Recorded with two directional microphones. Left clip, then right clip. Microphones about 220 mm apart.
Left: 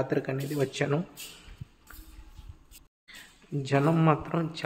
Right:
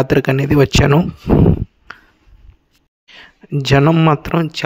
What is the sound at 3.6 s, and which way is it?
Speech, 45° right (ahead or behind).